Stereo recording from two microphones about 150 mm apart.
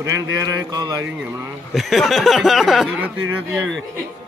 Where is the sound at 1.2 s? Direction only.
15° right (ahead or behind).